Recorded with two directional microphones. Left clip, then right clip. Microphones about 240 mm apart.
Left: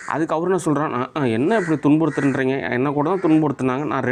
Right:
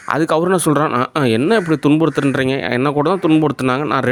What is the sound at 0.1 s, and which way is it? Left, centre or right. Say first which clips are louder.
Speech: right 5 dB; right.